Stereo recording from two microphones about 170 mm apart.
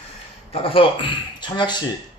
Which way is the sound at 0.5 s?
35° left (ahead or behind).